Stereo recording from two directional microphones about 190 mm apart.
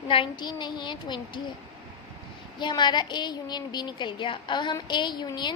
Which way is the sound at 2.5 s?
25° left (ahead or behind).